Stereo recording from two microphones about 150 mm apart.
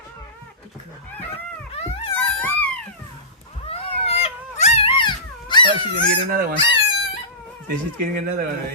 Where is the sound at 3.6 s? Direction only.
40° left (ahead or behind).